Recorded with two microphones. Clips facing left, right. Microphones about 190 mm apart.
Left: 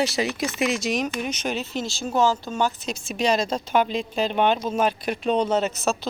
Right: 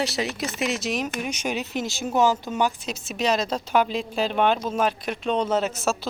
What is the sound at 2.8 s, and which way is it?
A woman's voice, 5° right (ahead or behind).